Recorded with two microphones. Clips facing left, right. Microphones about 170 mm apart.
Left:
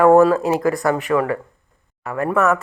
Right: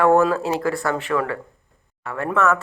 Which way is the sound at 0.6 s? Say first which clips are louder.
Left 4 dB; 15° left (ahead or behind).